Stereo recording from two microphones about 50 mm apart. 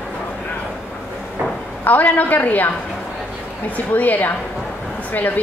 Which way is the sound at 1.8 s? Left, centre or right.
Left.